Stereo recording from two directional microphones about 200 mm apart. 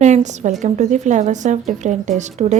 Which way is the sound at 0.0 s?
35° right (ahead or behind).